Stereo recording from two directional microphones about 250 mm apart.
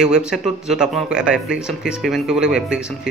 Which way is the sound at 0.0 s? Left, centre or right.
Centre.